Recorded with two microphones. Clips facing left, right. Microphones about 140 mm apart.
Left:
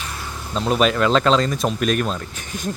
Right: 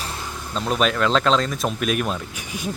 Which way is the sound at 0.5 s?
Centre (ahead or behind).